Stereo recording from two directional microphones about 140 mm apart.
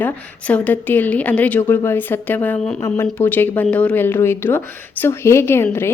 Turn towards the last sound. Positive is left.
turn(degrees=15)  # may be behind; listen again after turning